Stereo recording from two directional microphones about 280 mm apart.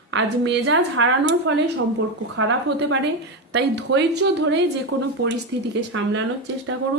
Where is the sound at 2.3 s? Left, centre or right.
Right.